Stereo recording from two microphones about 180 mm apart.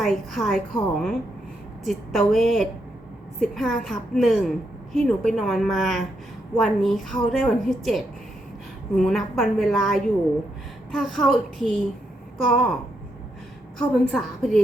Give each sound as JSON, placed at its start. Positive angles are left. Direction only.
{"t": 0.0, "sound": "a woman's voice", "side_deg": 0}
{"t": 13.7, "sound": "a woman's voice", "side_deg": 5}